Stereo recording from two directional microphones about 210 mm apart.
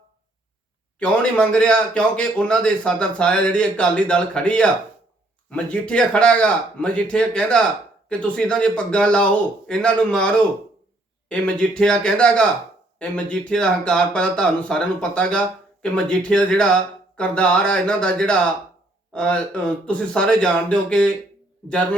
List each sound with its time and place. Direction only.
0.9 s a man's voice: 5° left (ahead or behind)